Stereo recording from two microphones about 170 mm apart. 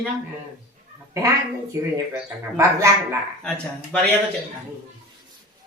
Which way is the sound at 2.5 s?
15° right (ahead or behind).